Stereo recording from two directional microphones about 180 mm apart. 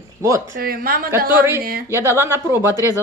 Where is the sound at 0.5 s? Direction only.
55° right (ahead or behind).